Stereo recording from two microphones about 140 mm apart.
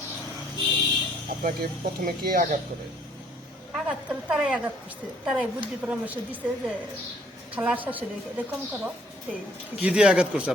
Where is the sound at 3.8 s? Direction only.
5° right (ahead or behind).